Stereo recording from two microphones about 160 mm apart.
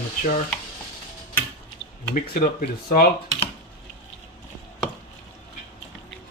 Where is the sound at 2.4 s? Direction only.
60° left (ahead or behind).